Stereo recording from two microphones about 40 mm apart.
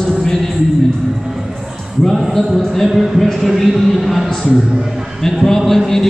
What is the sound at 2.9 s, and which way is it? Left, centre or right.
Speech, centre.